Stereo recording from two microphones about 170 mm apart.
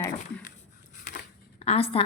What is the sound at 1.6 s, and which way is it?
Speech, 35° left (ahead or behind).